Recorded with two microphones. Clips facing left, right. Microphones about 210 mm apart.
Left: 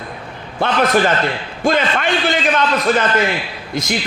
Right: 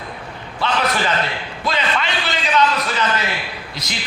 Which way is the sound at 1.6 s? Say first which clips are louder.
Left 6 dB; 50° left (ahead or behind).